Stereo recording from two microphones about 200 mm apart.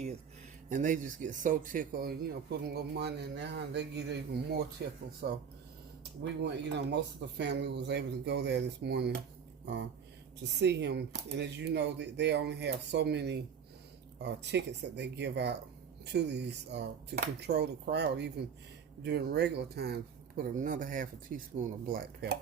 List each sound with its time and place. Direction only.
0.7 s speech: 40° right (ahead or behind)
6.4 s speech: 60° right (ahead or behind)
10.6 s speech: 60° right (ahead or behind)